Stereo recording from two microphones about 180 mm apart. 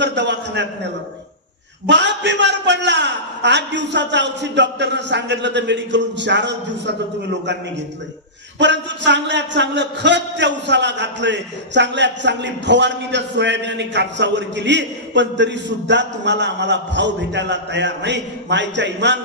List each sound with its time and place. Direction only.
0.0 s a man's voice: 75° right (ahead or behind)
1.9 s a man's voice: 80° right
8.5 s a man's voice: 80° right